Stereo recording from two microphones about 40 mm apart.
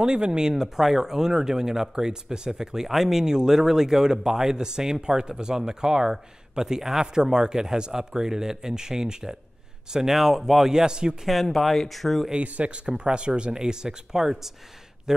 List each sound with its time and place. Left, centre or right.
0.0 s speech: centre
11.2 s speech: centre
12.5 s speech: right